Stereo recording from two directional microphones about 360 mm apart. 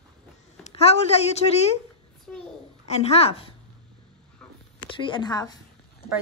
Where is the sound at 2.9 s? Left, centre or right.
Centre.